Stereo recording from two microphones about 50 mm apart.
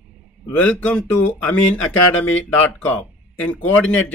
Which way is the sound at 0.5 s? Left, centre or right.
Left.